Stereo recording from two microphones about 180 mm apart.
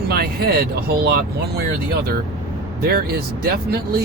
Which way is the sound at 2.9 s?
60° right (ahead or behind).